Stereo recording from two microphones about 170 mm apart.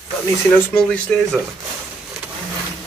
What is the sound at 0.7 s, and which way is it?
Speech, 5° left (ahead or behind).